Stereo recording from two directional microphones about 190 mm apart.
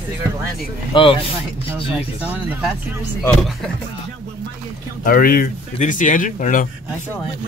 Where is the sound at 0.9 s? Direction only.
25° left (ahead or behind).